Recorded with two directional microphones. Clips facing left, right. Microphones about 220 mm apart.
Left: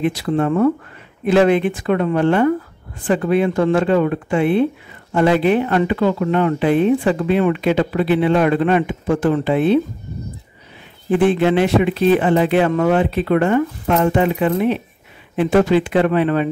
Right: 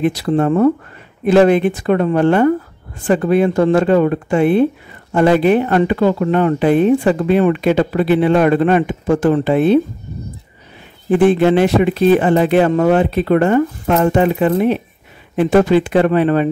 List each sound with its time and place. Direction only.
0.0 s speech: 40° right (ahead or behind)
11.1 s speech: 45° right (ahead or behind)